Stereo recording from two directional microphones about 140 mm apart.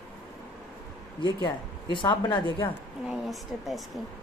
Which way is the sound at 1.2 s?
35° left (ahead or behind).